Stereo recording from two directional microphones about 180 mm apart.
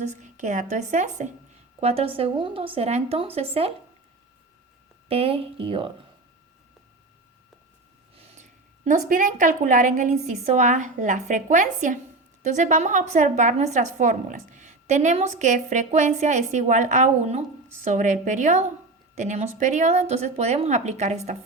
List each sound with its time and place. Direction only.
0.0 s speech: 40° right (ahead or behind)
5.0 s speech: 30° right (ahead or behind)
8.2 s a woman's voice: 40° right (ahead or behind)